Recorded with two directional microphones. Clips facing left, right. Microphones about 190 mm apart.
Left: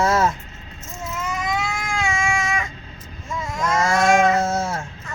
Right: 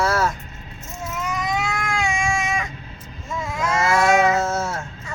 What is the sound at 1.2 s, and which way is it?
Baby cry, centre (ahead or behind).